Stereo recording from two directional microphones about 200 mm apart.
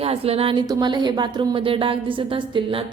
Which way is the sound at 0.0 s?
30° right (ahead or behind).